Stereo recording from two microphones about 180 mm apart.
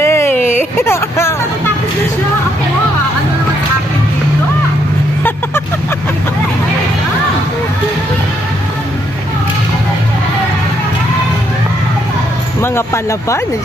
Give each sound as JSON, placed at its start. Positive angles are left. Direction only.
{"t": 0.0, "sound": "a sound", "side_deg": 15}
{"t": 0.8, "sound": "speech", "side_deg": 15}
{"t": 12.6, "sound": "speech", "side_deg": 15}